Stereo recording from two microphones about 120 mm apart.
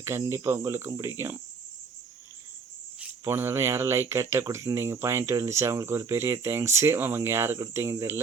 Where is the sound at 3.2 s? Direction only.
20° right (ahead or behind).